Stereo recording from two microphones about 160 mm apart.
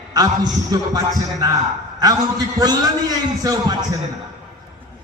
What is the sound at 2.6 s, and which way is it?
A man's voice, 25° right (ahead or behind).